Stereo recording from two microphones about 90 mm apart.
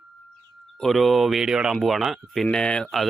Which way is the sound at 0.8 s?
Centre (ahead or behind).